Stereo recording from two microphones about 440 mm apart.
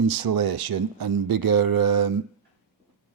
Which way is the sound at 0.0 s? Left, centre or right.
Right.